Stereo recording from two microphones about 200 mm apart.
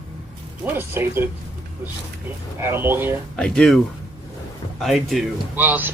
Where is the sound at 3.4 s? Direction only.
5° left (ahead or behind).